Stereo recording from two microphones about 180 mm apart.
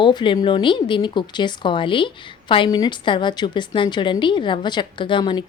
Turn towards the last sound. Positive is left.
turn(degrees=25)  # may be behind; listen again after turning